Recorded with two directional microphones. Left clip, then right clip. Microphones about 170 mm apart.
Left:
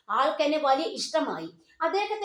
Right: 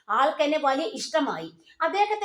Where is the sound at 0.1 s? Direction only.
35° right (ahead or behind).